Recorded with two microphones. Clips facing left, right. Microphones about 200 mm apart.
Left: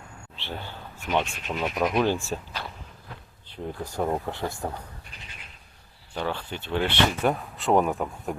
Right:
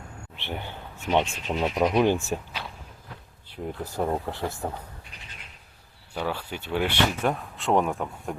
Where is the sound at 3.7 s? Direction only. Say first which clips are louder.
Even; 5° right (ahead or behind).